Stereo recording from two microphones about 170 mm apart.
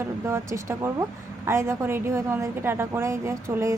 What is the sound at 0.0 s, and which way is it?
A woman's voice, 15° right (ahead or behind).